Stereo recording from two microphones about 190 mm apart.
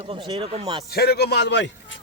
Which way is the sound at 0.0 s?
30° right (ahead or behind).